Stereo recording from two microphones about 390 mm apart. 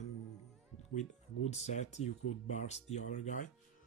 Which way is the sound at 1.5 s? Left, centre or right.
Centre.